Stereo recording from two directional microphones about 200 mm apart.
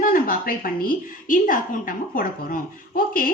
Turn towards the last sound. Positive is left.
turn(degrees=45)  # may be behind; listen again after turning